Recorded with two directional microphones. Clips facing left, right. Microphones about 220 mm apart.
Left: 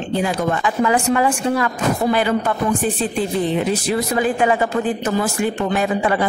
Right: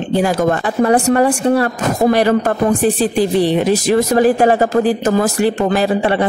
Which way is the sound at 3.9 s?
45° right (ahead or behind).